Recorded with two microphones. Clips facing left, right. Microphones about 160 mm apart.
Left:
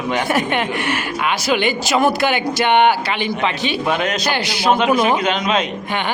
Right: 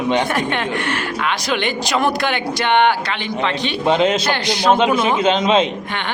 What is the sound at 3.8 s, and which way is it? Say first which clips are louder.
Speech: right 6 dB; 25° right (ahead or behind).